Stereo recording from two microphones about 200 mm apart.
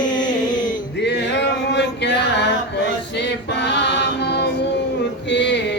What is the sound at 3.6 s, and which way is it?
Music, 60° left (ahead or behind).